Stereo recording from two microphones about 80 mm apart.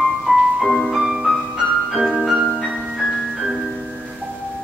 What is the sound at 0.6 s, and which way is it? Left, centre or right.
Music, centre.